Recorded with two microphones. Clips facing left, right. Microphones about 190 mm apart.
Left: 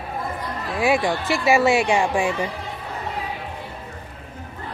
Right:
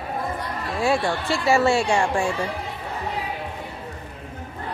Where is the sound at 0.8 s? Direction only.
15° left (ahead or behind).